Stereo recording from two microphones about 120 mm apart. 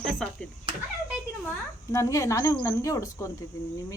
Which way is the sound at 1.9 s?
25° left (ahead or behind).